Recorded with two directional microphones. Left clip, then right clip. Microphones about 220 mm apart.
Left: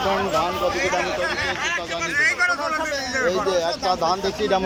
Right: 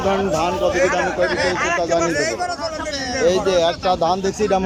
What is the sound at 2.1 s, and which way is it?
Speech, 40° right (ahead or behind).